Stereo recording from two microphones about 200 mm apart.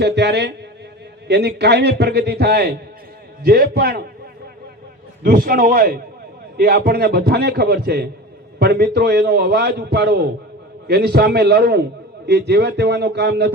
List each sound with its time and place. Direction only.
0.0 s a man's voice: 60° right (ahead or behind)
5.2 s a man's voice: 45° right (ahead or behind)